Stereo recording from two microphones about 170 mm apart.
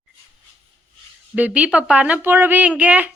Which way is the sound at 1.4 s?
10° right (ahead or behind).